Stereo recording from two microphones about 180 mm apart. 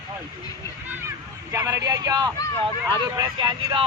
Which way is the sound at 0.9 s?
15° right (ahead or behind).